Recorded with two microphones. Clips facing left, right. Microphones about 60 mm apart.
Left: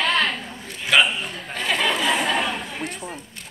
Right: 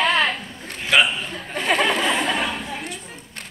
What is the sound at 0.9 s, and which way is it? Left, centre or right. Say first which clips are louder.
Speech: even; centre.